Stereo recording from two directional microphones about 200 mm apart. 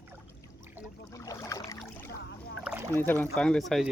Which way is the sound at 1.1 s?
15° left (ahead or behind).